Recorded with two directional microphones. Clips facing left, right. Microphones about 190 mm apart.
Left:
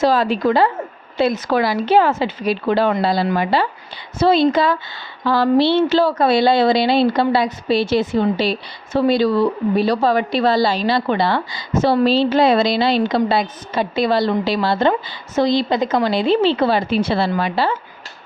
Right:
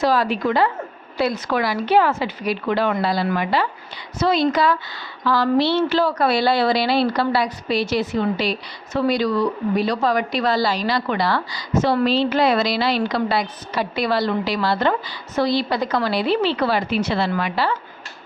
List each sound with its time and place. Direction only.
0.0 s a woman's voice: 25° left (ahead or behind)